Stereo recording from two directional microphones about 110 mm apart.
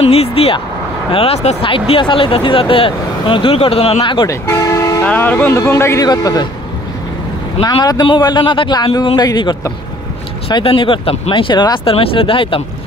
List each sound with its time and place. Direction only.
0.0 s vehicle: 65° left (ahead or behind)
1.1 s speech: 65° left (ahead or behind)
1.6 s speech: 50° left (ahead or behind)
4.3 s toot: 25° left (ahead or behind)
5.0 s a man's voice: 15° left (ahead or behind); by 6.4 s 35° left (ahead or behind)
7.6 s a man's voice: 35° left (ahead or behind)
10.6 s speech: 55° left (ahead or behind)
11.8 s speech: 60° left (ahead or behind)